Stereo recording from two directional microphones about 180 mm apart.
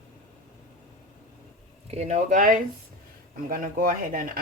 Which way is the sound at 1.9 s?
35° right (ahead or behind).